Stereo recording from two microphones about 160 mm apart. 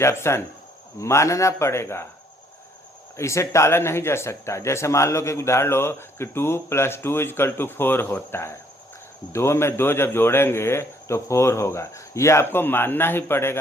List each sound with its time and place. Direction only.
0.0 s speech: 15° left (ahead or behind)
3.2 s speech: 20° left (ahead or behind)